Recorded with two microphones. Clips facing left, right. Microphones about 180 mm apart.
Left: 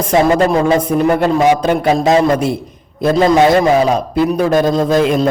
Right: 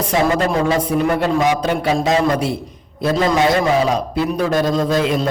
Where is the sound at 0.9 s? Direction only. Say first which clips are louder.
Left 4 dB; 45° left (ahead or behind).